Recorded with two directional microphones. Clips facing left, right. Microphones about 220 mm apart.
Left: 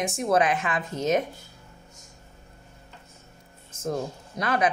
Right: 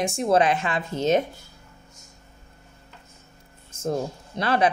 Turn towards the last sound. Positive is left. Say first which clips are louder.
# right 3 dB
turn(degrees=-30)  # may be behind; listen again after turning